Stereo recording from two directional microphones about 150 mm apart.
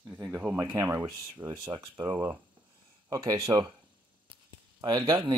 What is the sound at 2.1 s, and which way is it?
Speech, 10° right (ahead or behind).